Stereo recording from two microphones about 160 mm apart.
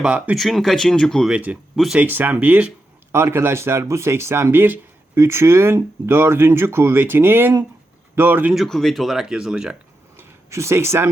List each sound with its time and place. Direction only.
0.0 s speech: 5° right (ahead or behind)
8.5 s speech: centre (ahead or behind)
10.2 s a sound: 15° right (ahead or behind)